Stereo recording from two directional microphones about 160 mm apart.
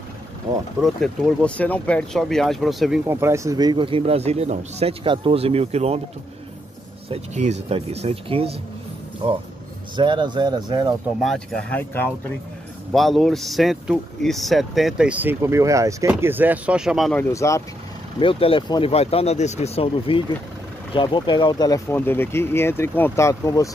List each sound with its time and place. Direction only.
0.8 s speech: 5° left (ahead or behind)
3.1 s speech: 15° right (ahead or behind); by 5.9 s 40° right (ahead or behind)
7.1 s speech: 45° right (ahead or behind); by 11.0 s 25° right (ahead or behind)
11.2 s speech: 10° left (ahead or behind)
12.9 s speech: centre (ahead or behind)
17.1 s speech: 15° left (ahead or behind)
18.2 s speech: 35° left (ahead or behind); by 23.7 s 20° left (ahead or behind)